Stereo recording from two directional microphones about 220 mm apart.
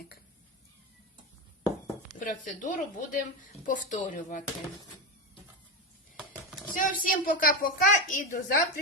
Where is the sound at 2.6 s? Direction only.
35° left (ahead or behind).